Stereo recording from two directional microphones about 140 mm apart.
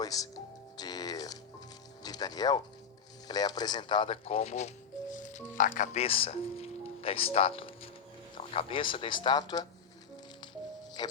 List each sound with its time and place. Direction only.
0.0 s speech: 25° left (ahead or behind)
0.8 s music: 30° left (ahead or behind)
2.0 s speech: 30° left (ahead or behind); by 4.7 s 50° left (ahead or behind)
5.1 s speech: 65° left (ahead or behind); by 9.6 s 30° left (ahead or behind)
11.0 s music: 35° left (ahead or behind)